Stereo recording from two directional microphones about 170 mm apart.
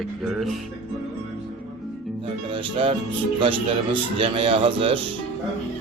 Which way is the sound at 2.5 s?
30° right (ahead or behind).